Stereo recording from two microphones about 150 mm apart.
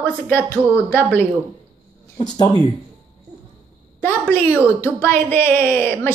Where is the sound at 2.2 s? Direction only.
25° left (ahead or behind).